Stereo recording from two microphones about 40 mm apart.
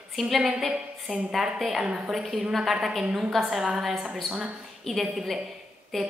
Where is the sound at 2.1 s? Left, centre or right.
Centre.